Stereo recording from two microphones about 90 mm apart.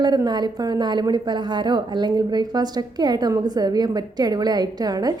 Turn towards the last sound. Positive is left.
turn(degrees=-45)  # may be behind; listen again after turning